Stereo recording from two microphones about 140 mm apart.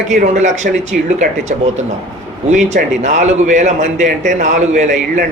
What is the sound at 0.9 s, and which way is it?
Speech, 90° right.